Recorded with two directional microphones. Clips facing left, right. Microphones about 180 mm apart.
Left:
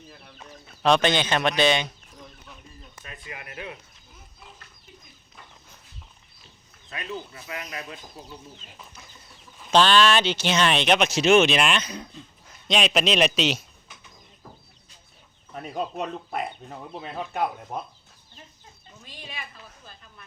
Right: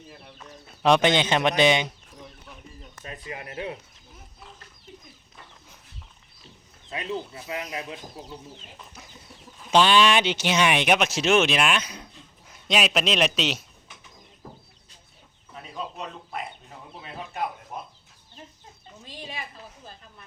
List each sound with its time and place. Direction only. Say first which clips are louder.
0.1 s speech: right 2 dB; 25° right (ahead or behind)
0.8 s speech: right 1 dB; 15° right (ahead or behind)
3.0 s speech: right 4 dB; 35° right (ahead or behind)
6.9 s speech: right 4 dB; 25° right (ahead or behind)
9.7 s a man's voice: even; 15° right (ahead or behind)
15.5 s speech: left 6 dB; 50° left (ahead or behind)
19.0 s a woman's voice: right 3 dB; 35° right (ahead or behind)